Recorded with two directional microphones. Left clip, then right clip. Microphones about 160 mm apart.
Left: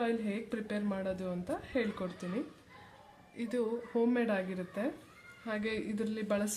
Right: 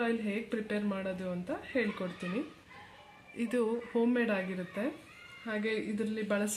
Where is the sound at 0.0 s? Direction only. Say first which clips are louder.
Right 1 dB; 5° right (ahead or behind).